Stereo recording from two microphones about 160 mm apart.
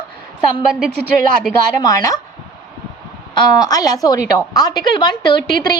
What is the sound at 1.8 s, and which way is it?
Speech, 20° left (ahead or behind).